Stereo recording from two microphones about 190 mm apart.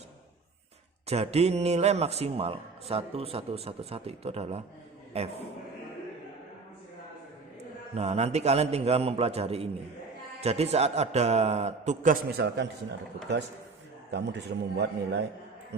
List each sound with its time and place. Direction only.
1.0 s a man's voice: 35° right (ahead or behind)
7.9 s a man's voice: 35° right (ahead or behind)
14.1 s a man's voice: 65° right (ahead or behind)